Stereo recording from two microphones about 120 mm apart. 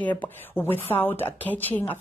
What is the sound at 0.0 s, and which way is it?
A woman's voice, 15° left (ahead or behind).